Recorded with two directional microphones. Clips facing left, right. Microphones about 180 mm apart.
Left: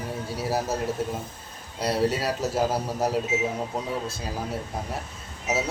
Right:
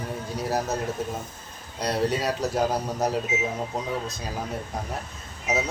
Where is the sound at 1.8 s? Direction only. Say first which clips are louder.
Left 1 dB; 5° left (ahead or behind).